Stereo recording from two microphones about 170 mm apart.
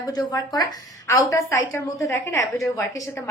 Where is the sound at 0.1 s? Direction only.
20° left (ahead or behind).